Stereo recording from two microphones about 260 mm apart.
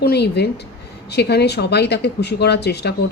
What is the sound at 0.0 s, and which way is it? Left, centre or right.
A woman's voice, left.